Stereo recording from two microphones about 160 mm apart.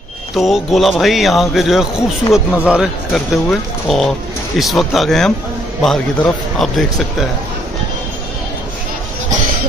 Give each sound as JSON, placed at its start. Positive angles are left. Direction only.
{"t": 0.4, "sound": "speech", "side_deg": 0}